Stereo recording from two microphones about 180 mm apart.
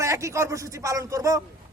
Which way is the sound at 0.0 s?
15° right (ahead or behind).